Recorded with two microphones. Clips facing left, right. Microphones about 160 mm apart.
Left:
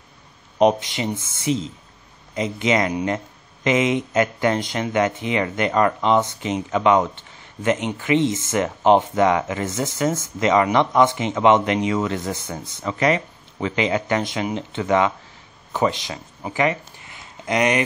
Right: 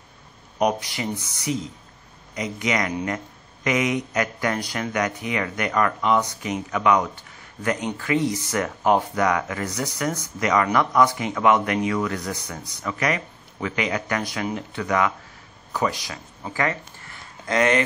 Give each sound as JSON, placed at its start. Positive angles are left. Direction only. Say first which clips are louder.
{"t": 0.6, "sound": "speech", "louder": "left 5 dB", "side_deg": 25}